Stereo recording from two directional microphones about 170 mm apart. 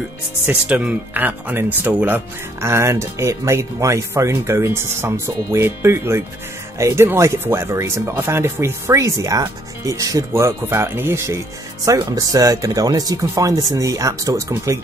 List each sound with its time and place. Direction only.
0.5 s speech: 10° right (ahead or behind)